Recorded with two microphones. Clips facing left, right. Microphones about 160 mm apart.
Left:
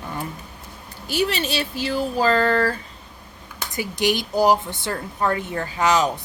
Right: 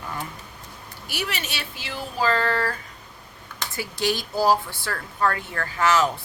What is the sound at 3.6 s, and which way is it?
Speech, 15° left (ahead or behind).